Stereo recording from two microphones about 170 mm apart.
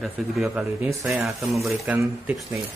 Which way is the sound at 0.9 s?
15° right (ahead or behind).